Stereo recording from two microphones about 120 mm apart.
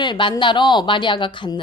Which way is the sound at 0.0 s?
40° left (ahead or behind).